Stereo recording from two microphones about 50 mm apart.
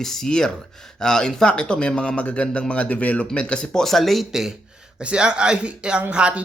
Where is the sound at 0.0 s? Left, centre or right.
Centre.